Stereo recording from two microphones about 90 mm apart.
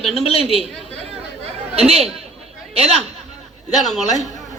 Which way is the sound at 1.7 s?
90° right.